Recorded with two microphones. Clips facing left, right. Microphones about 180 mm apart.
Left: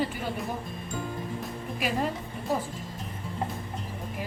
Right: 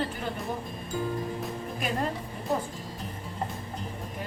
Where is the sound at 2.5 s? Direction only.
Centre (ahead or behind).